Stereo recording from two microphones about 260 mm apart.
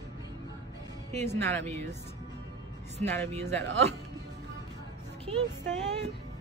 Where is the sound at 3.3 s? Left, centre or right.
Right.